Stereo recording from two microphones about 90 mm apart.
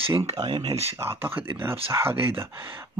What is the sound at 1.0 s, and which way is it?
Speech, 25° right (ahead or behind).